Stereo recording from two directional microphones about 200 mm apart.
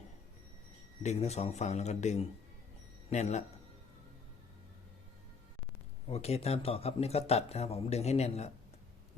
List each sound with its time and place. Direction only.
1.0 s speech: 35° left (ahead or behind)
6.1 s speech: 30° left (ahead or behind)